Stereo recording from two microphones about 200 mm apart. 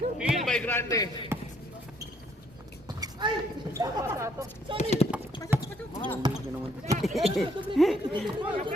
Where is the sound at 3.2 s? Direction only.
20° right (ahead or behind).